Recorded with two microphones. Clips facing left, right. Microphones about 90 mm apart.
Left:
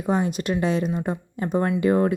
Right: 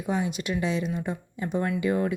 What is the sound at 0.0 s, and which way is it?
A woman's voice, 45° left (ahead or behind).